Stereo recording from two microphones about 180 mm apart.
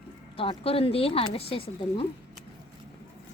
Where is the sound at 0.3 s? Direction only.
30° left (ahead or behind).